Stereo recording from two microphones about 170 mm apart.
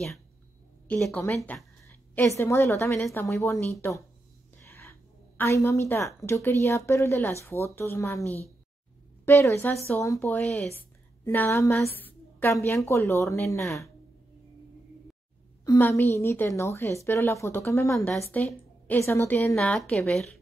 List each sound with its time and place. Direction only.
0.8 s a woman's voice: 5° left (ahead or behind)
4.6 s a sound: 15° left (ahead or behind)
5.4 s a woman's voice: 15° left (ahead or behind)
9.2 s a woman's voice: 15° left (ahead or behind)
15.6 s a woman's voice: 20° left (ahead or behind)
17.8 s a woman's voice: 5° left (ahead or behind)